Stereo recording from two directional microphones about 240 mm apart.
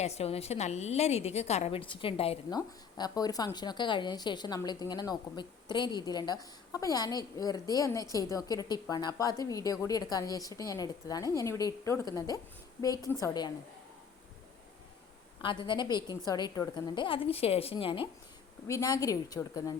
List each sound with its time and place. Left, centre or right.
0.0 s a woman's voice: left
15.4 s a woman's voice: left